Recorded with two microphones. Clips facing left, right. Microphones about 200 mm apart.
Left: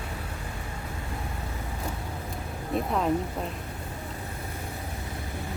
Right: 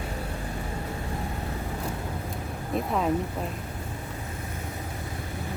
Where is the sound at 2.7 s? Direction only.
Centre (ahead or behind).